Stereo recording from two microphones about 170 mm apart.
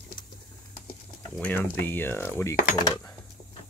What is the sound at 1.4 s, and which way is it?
Speech, 10° left (ahead or behind).